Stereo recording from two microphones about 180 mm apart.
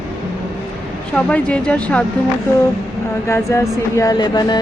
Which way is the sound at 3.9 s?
20° left (ahead or behind).